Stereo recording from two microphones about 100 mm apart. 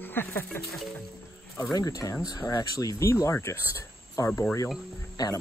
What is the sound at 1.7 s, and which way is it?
Speech, 35° left (ahead or behind).